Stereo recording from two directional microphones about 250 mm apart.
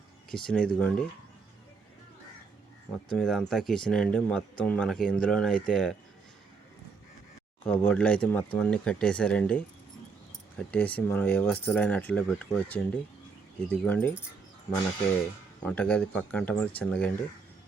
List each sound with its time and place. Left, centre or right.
0.3 s speech: centre
3.1 s speech: centre
7.6 s speech: centre
15.6 s speech: centre